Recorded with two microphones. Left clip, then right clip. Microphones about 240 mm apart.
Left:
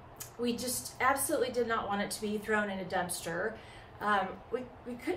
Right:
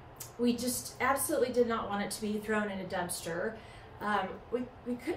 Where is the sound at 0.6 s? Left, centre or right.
Centre.